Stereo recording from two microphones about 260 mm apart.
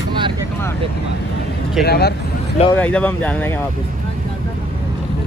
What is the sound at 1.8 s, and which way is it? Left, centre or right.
Speech, left.